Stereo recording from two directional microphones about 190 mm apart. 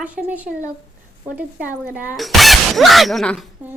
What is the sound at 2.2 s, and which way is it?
Speech, centre (ahead or behind).